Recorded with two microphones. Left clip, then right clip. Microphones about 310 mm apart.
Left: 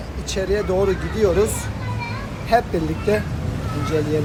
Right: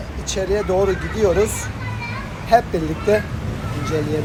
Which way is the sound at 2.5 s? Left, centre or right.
Centre.